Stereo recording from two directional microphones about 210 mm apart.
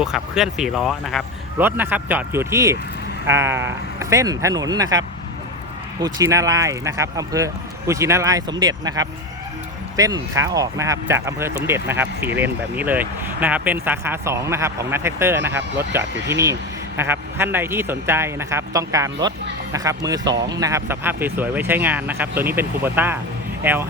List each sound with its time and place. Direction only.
0.0 s speech: 5° right (ahead or behind)